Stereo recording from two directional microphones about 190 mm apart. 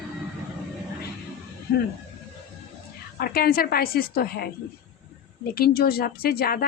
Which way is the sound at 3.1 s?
50° left (ahead or behind).